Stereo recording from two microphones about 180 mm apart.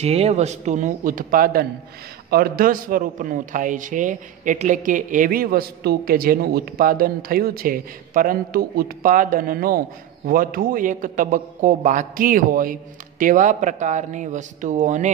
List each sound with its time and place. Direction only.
0.0 s a man's voice: 35° right (ahead or behind)